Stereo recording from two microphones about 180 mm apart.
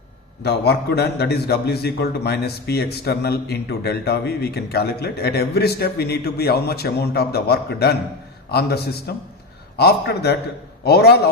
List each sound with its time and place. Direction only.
0.4 s a man's voice: 65° left (ahead or behind)